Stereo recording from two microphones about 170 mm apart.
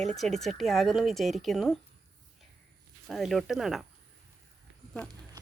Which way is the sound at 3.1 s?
Centre (ahead or behind).